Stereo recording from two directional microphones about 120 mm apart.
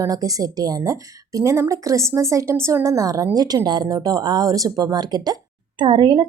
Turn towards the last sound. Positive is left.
turn(degrees=-40)  # may be behind; listen again after turning